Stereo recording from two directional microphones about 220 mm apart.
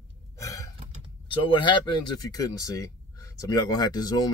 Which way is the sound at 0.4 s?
15° left (ahead or behind).